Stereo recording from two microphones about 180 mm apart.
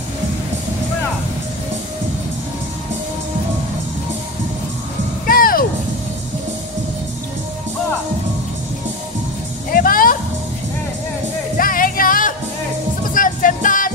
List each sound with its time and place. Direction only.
5.2 s music: 55° left (ahead or behind)
9.7 s music: 50° left (ahead or behind)
11.5 s music: 50° left (ahead or behind)